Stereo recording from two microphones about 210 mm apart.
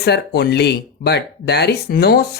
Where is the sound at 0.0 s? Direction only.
50° left (ahead or behind).